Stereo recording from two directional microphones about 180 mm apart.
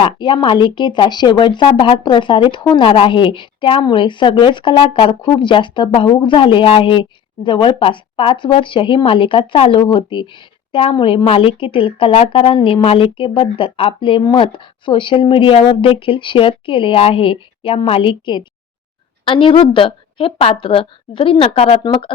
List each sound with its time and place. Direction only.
0.0 s a woman's voice: 25° left (ahead or behind)